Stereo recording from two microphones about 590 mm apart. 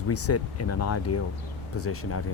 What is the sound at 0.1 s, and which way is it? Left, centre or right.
Speech, left.